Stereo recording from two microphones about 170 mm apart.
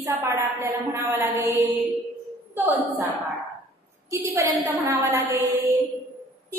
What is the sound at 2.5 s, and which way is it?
Speech, 10° right (ahead or behind).